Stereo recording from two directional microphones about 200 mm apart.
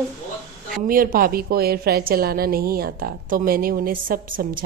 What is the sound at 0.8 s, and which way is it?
A woman's voice, 45° right (ahead or behind).